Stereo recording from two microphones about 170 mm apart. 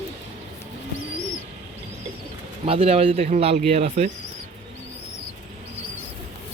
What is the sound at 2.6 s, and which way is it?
Speech, 35° right (ahead or behind).